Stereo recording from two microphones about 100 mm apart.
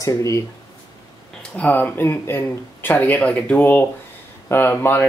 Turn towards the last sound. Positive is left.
turn(degrees=20)  # may be behind; listen again after turning